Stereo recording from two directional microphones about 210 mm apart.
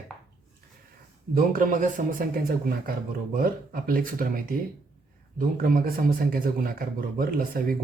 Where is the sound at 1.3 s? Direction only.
40° right (ahead or behind).